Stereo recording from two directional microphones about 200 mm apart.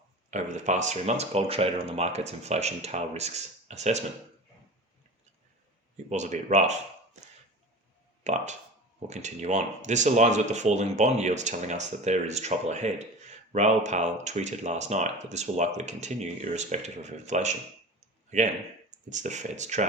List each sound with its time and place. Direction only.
0.3 s speech: 35° right (ahead or behind)
6.1 s speech: 35° right (ahead or behind)
8.2 s speech: 35° right (ahead or behind)